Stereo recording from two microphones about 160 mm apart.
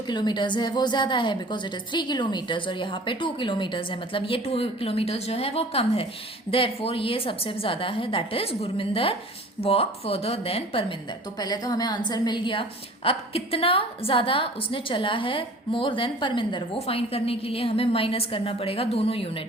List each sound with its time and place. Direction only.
0.1 s a woman's voice: 30° left (ahead or behind)
11.3 s a woman's voice: 25° left (ahead or behind)